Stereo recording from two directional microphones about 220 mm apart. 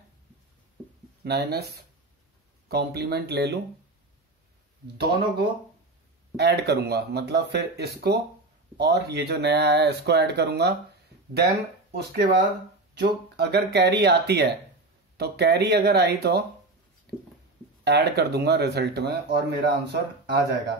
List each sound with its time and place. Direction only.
1.2 s speech: 45° right (ahead or behind)
4.9 s speech: 50° right (ahead or behind)
17.8 s speech: 50° right (ahead or behind)